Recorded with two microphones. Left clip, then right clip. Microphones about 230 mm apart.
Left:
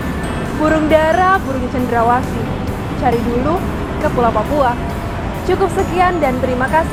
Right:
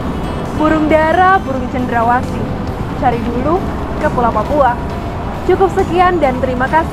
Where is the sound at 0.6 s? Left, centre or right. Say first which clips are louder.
Right 1 dB; right.